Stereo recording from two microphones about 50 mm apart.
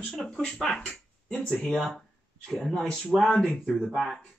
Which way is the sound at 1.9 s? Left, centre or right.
Centre.